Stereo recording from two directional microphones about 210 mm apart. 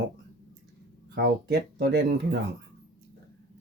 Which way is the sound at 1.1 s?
55° right (ahead or behind).